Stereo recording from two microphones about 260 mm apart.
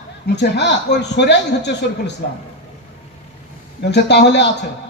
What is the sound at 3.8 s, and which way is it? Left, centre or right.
Speech, left.